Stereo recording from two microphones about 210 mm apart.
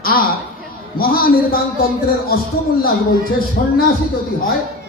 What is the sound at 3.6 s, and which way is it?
Speech, 50° left (ahead or behind).